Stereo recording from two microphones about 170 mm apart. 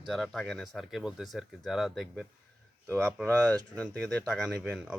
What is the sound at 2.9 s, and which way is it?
A man's voice, 15° right (ahead or behind).